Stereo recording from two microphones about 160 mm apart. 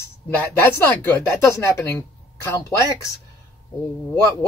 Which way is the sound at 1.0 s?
20° left (ahead or behind).